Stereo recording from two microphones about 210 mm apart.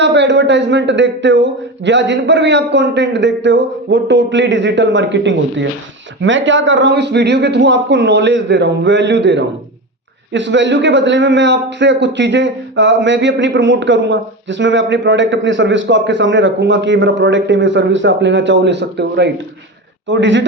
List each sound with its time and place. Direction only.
0.0 s speech: 55° right (ahead or behind)